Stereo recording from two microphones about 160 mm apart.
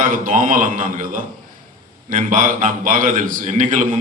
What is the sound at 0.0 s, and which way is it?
A man's voice, 55° right (ahead or behind).